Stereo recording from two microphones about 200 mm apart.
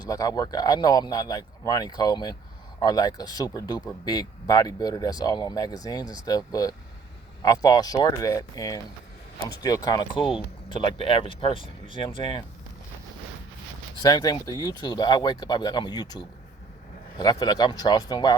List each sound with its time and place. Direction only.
0.0 s speech: 20° left (ahead or behind)
14.0 s speech: 20° left (ahead or behind)